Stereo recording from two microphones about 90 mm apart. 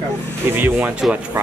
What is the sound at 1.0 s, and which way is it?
Speech, 5° right (ahead or behind).